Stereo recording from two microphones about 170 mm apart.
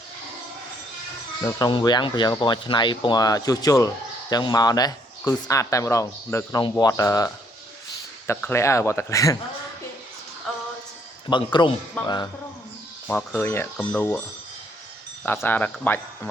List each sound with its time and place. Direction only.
1.4 s speech: 20° left (ahead or behind)
8.3 s speech: 15° left (ahead or behind)
11.3 s speech: 30° left (ahead or behind)
13.1 s speech: 10° left (ahead or behind)
15.4 s speech: 10° left (ahead or behind)